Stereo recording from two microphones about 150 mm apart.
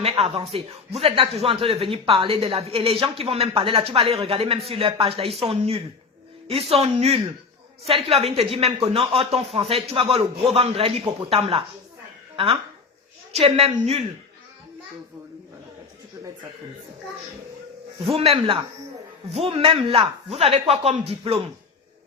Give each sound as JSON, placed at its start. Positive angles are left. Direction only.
{"t": 0.0, "sound": "speech", "side_deg": -40}
{"t": 13.3, "sound": "speech", "side_deg": -45}
{"t": 18.2, "sound": "speech", "side_deg": -40}